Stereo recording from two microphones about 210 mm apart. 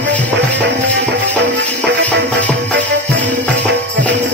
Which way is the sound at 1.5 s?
60° right (ahead or behind).